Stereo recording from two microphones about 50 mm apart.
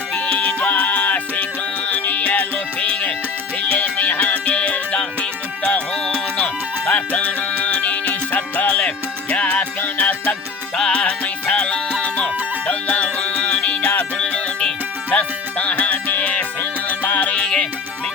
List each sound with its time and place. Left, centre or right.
0.1 s music: left
6.8 s music: left
15.1 s music: left
17.4 s music: centre